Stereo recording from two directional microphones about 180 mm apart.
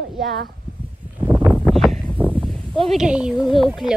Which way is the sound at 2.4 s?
Centre (ahead or behind).